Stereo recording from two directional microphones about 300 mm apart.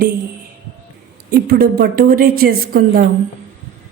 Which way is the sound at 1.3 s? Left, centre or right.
Right.